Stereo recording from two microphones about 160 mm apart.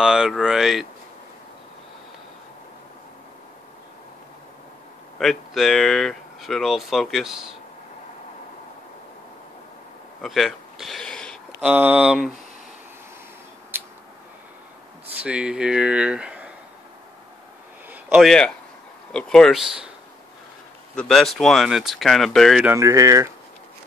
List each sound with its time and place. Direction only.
0.0 s speech: 5° right (ahead or behind)
5.2 s speech: centre (ahead or behind)
10.2 s a sound: centre (ahead or behind)
11.6 s speech: 10° right (ahead or behind)
13.7 s a sound: 10° right (ahead or behind)
15.2 s speech: 5° right (ahead or behind)
17.8 s a sound: centre (ahead or behind)
19.1 s speech: 5° left (ahead or behind)
20.9 s speech: 5° left (ahead or behind)
22.7 s speech: 20° right (ahead or behind)